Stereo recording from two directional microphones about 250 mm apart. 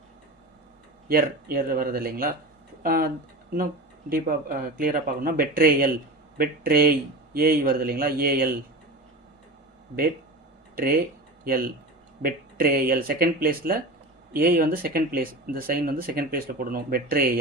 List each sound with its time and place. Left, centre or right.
1.0 s speech: right
4.1 s speech: right
11.4 s speech: right